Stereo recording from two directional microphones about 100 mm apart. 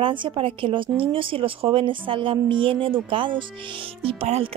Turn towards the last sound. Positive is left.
turn(degrees=-75)  # may be behind; listen again after turning